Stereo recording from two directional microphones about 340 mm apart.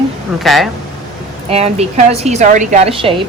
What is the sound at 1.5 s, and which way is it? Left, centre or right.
A woman's voice, centre.